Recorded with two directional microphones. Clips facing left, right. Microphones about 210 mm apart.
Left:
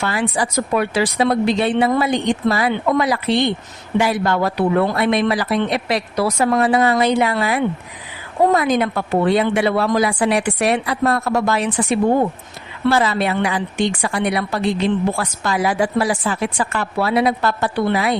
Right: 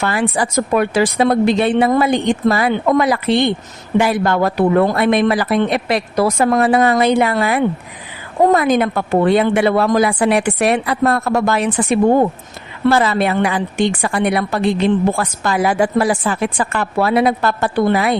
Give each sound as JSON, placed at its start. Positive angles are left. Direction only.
{"t": 0.0, "sound": "a woman's voice", "side_deg": -55}